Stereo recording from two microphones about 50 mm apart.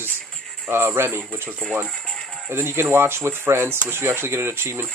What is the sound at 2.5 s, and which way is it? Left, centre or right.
Speech, right.